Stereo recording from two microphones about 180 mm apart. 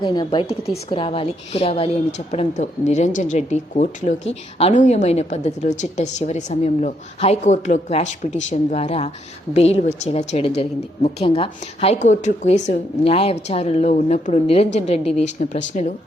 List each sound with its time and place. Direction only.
0.0 s a woman's voice: 25° left (ahead or behind); by 15.9 s 45° left (ahead or behind)